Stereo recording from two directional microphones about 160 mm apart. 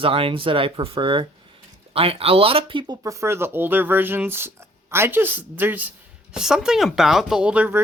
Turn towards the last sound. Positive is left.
turn(degrees=-10)  # may be behind; listen again after turning